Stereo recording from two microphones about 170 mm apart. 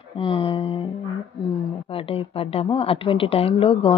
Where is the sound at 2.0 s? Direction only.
35° left (ahead or behind).